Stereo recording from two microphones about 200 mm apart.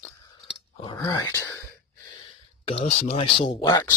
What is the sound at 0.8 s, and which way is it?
Speech, 20° left (ahead or behind).